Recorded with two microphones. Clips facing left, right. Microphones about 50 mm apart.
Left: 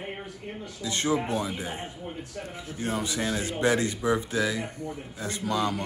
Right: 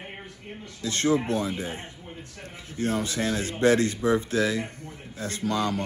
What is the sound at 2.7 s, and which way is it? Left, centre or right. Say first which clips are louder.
Speech: right 3 dB; left.